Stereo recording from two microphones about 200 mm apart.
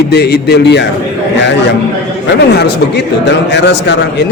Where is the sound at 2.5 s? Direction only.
60° left (ahead or behind).